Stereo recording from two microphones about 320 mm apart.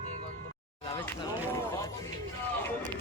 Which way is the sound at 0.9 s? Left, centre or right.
Centre.